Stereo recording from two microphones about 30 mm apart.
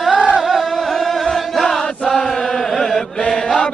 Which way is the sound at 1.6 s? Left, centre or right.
Centre.